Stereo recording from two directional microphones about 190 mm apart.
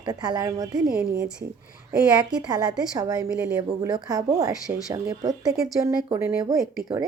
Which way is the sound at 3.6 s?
20° right (ahead or behind).